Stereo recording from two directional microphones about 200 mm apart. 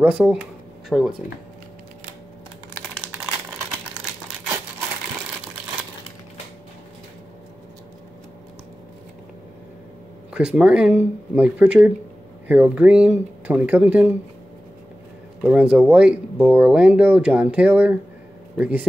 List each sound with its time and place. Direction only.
0.0 s speech: 5° right (ahead or behind)
10.3 s speech: 5° right (ahead or behind)
15.4 s speech: 5° right (ahead or behind)